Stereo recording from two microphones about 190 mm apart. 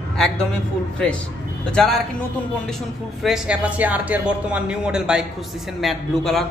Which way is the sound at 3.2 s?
Centre (ahead or behind).